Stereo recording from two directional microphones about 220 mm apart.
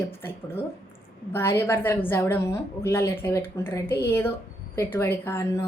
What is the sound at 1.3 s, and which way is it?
A woman's voice, 10° left (ahead or behind).